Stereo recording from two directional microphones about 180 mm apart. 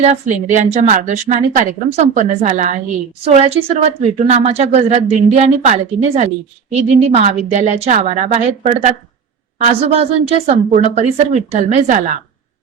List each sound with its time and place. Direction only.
0.0 s a woman's voice: 40° right (ahead or behind)